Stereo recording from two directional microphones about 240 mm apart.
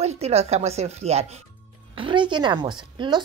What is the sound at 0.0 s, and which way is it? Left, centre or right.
A woman's voice, right.